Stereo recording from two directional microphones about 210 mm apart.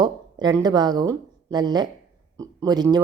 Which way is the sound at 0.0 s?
20° right (ahead or behind).